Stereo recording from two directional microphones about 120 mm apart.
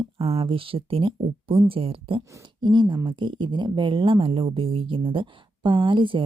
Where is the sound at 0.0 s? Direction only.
50° right (ahead or behind).